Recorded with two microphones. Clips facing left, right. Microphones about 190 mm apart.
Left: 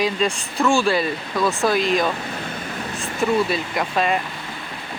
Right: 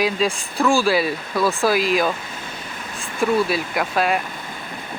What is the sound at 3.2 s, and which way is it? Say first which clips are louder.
Speech: right 1 dB; centre (ahead or behind).